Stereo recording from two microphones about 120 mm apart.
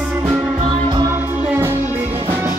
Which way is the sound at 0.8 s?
40° right (ahead or behind).